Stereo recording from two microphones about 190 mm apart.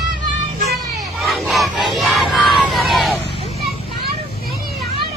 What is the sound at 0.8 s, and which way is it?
Children playing, 20° right (ahead or behind).